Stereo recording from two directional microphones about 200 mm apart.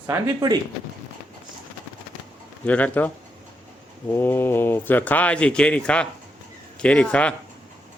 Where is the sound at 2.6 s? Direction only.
5° left (ahead or behind).